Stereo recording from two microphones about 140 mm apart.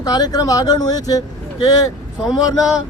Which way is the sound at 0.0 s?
30° left (ahead or behind).